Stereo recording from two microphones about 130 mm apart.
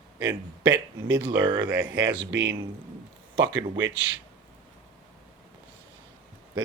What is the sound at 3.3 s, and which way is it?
Speech, 40° right (ahead or behind).